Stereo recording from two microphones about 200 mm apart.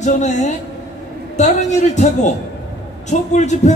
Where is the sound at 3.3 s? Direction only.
35° left (ahead or behind).